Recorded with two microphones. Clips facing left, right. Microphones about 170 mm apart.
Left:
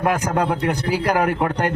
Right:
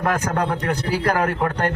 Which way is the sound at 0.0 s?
15° left (ahead or behind).